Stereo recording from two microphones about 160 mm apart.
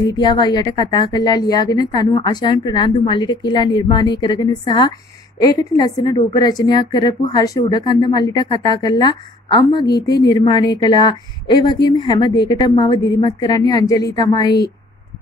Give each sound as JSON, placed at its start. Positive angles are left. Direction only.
{"t": 0.0, "sound": "a woman's voice", "side_deg": 25}